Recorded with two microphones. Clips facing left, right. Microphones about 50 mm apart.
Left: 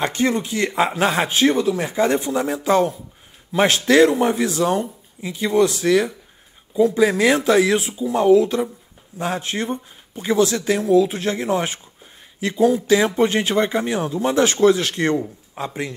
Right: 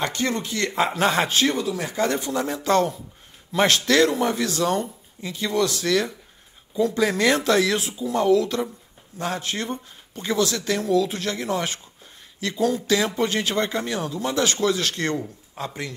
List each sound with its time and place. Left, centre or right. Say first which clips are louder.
0.0 s speech: left 5 dB; left
1.3 s speech: left 4 dB; left
1.6 s speech: left 6 dB; left
1.9 s speech: left 5 dB; left